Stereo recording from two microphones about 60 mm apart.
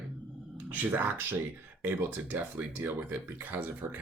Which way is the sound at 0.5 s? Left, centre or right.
Right.